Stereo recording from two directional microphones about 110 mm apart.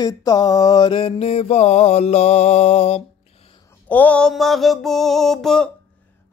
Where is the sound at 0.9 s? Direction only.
60° left (ahead or behind); by 3.0 s 85° left.